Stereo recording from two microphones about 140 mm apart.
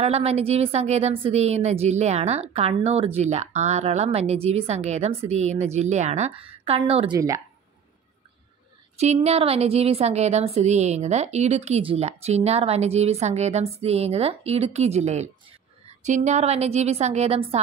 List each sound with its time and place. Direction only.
0.0 s a woman's voice: 45° right (ahead or behind)
6.3 s a woman's voice: 40° right (ahead or behind)
7.1 s speech: 25° right (ahead or behind)
8.9 s a woman's voice: 50° right (ahead or behind)